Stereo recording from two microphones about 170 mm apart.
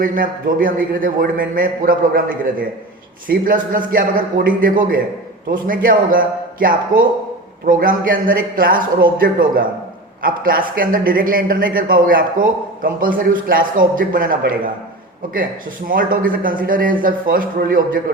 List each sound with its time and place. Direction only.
0.0 s a woman's voice: 55° right (ahead or behind)
15.9 s a woman's voice: 55° right (ahead or behind)